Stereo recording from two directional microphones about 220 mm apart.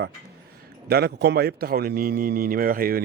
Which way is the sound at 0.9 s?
45° right (ahead or behind).